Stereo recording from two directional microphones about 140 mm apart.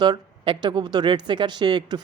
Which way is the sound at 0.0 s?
30° right (ahead or behind).